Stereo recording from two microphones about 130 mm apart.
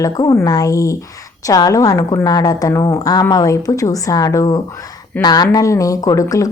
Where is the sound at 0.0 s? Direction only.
25° left (ahead or behind).